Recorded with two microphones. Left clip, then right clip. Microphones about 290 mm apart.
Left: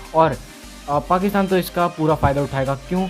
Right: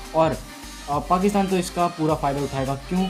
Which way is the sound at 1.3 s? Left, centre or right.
Left.